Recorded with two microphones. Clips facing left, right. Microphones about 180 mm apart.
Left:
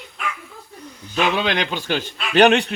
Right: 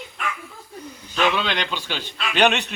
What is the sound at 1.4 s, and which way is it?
A man's voice, 50° left (ahead or behind).